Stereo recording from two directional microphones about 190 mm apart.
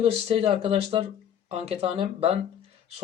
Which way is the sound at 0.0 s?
30° right (ahead or behind).